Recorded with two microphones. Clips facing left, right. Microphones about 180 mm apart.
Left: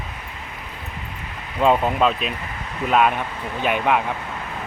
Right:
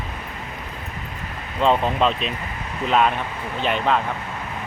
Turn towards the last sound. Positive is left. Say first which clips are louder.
# left 1 dB
turn(degrees=10)  # may be behind; listen again after turning